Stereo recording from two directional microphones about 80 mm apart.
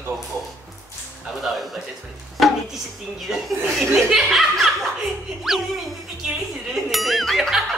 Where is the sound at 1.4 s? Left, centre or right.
Centre.